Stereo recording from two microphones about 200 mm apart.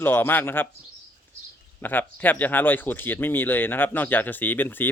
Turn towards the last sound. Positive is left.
turn(degrees=10)  # may be behind; listen again after turning